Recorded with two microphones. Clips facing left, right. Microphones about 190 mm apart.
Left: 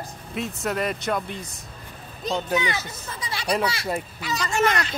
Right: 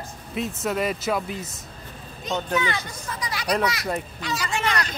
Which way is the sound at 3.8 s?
Centre (ahead or behind).